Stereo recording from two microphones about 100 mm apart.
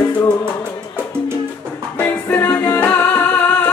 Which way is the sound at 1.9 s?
20° left (ahead or behind).